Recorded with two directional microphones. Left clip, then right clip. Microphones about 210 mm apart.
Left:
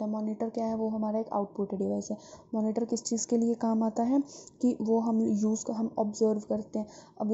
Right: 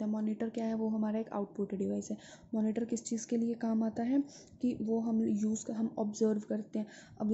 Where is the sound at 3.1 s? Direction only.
10° left (ahead or behind).